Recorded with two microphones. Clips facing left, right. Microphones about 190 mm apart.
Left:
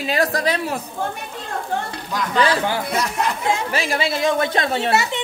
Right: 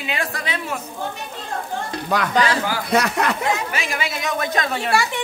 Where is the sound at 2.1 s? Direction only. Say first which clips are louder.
Even; 70° right (ahead or behind).